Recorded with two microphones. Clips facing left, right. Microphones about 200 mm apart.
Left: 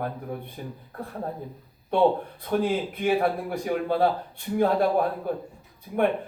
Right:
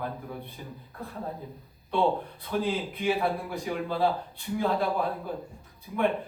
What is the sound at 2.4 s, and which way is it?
A man's voice, 50° left (ahead or behind).